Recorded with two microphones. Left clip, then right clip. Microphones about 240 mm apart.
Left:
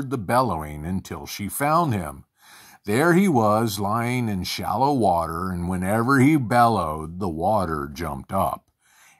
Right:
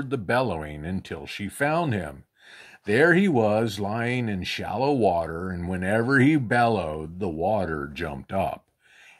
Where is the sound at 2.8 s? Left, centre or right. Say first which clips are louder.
Even; left.